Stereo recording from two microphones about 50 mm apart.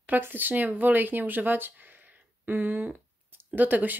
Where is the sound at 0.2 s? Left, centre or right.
Right.